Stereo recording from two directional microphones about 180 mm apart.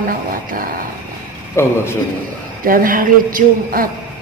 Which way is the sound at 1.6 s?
15° left (ahead or behind).